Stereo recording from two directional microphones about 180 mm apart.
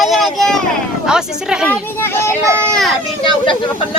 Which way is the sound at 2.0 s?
15° left (ahead or behind).